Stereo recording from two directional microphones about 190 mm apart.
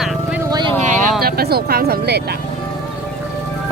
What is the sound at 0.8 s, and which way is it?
Vehicle, 40° right (ahead or behind).